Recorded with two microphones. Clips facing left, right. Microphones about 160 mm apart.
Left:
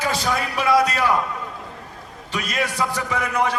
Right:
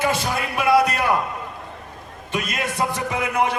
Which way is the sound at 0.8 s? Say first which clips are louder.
Even; 55° right (ahead or behind).